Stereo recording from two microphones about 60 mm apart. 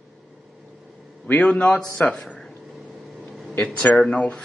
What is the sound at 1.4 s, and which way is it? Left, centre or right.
Speech, centre.